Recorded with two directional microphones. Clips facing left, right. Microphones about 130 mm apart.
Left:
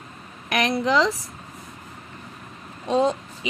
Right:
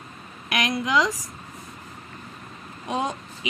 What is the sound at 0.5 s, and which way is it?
Speech, 35° left (ahead or behind).